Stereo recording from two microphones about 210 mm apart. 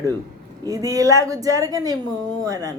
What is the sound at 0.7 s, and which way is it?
A woman's voice, 15° right (ahead or behind).